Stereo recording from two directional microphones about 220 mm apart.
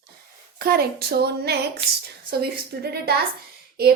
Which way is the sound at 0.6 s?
45° right (ahead or behind).